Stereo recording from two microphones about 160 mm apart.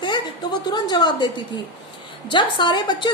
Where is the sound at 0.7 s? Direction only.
25° left (ahead or behind).